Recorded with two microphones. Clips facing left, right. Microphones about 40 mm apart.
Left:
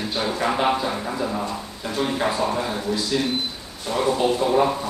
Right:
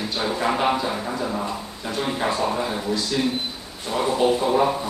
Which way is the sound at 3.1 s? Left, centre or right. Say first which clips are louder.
Even; centre.